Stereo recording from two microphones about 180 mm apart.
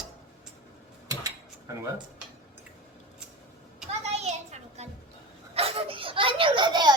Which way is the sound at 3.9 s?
35° right (ahead or behind).